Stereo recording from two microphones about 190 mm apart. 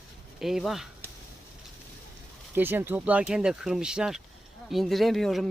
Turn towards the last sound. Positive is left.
turn(degrees=0)  # may be behind; listen again after turning